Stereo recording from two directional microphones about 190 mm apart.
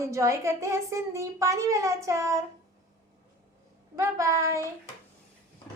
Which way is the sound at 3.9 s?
15° right (ahead or behind).